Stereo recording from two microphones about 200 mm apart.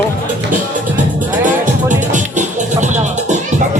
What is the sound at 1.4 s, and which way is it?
Music, 40° right (ahead or behind).